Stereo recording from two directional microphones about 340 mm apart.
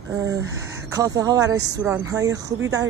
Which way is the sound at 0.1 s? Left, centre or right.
Centre.